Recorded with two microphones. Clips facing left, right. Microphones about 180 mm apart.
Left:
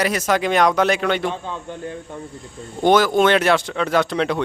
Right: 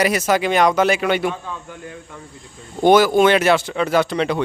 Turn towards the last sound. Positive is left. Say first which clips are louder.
# right 1 dB
turn(degrees=0)  # may be behind; listen again after turning